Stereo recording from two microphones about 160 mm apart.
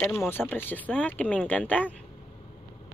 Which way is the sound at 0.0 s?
5° left (ahead or behind).